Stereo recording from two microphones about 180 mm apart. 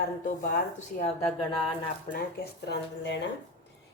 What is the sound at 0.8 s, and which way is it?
Speech, 35° left (ahead or behind).